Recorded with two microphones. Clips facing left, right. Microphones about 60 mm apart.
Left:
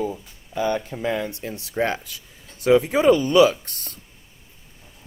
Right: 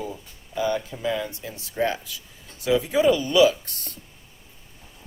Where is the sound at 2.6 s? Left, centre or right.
Left.